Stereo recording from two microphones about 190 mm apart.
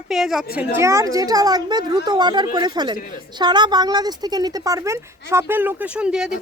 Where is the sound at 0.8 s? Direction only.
15° right (ahead or behind).